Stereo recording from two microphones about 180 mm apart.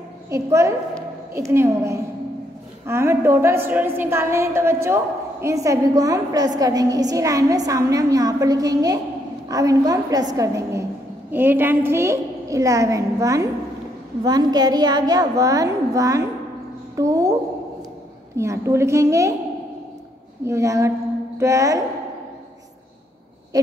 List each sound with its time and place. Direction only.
0.3 s a woman's voice: 15° right (ahead or behind)
20.4 s a woman's voice: 15° right (ahead or behind)
23.5 s owl: 20° right (ahead or behind)